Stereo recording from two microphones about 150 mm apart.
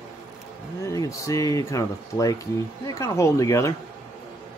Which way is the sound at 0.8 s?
20° left (ahead or behind).